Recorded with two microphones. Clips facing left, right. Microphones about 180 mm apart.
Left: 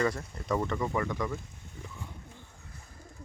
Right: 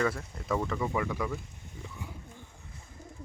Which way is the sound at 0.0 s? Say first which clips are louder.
Even; centre (ahead or behind).